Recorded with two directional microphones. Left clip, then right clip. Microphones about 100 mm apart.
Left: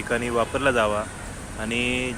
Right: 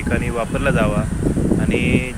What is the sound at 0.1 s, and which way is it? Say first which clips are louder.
Speech: right 1 dB; 30° left (ahead or behind).